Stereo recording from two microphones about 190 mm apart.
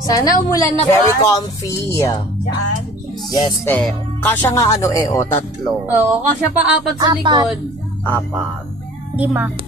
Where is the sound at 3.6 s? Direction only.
10° left (ahead or behind).